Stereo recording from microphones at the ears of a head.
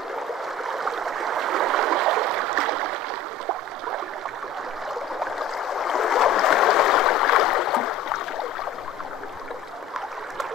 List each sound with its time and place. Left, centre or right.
0.9 s stream: right
5.7 s stream: left